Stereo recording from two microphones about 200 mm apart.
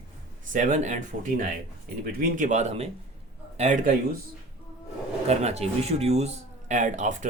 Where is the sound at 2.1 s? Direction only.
40° right (ahead or behind).